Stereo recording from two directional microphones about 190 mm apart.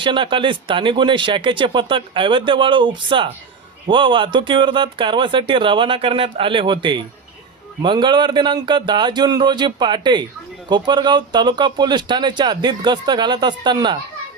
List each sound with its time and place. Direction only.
0.0 s speech: 25° right (ahead or behind)